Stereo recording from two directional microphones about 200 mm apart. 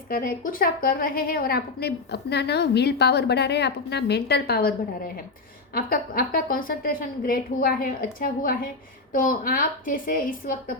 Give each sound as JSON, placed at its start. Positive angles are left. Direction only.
{"t": 0.1, "sound": "a woman's voice", "side_deg": 45}
{"t": 5.7, "sound": "a woman's voice", "side_deg": 45}